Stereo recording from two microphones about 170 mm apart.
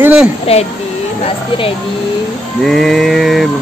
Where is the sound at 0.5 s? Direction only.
35° left (ahead or behind).